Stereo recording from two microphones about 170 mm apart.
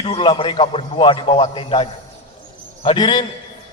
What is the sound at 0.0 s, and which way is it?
A man's voice, 30° left (ahead or behind).